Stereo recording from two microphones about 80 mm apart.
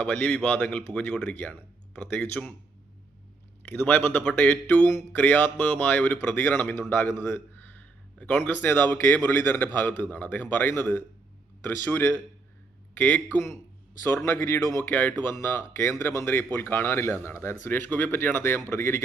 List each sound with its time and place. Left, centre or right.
0.0 s speech: centre
3.6 s a man's voice: left
14.3 s speech: left
14.8 s speech: left